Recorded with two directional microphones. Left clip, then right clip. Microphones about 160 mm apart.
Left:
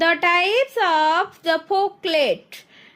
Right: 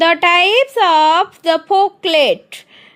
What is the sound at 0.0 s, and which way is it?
Speech, 45° right (ahead or behind).